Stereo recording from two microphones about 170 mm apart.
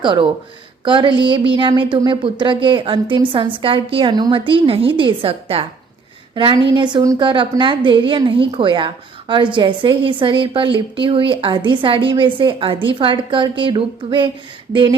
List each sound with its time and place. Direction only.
0.0 s a woman's voice: 30° right (ahead or behind)